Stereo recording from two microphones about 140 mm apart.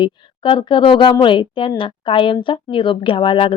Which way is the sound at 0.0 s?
35° left (ahead or behind).